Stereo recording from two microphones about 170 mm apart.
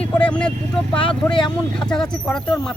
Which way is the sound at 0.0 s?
5° left (ahead or behind).